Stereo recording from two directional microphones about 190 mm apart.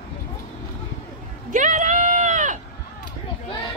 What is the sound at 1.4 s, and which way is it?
Sheep, 40° right (ahead or behind).